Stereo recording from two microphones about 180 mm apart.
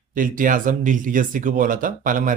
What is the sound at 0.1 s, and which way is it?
A man's voice, 50° right (ahead or behind).